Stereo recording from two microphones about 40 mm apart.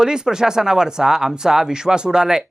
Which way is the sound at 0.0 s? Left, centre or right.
Centre.